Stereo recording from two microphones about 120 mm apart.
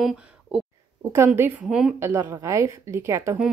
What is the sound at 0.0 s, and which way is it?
Speech, 5° right (ahead or behind).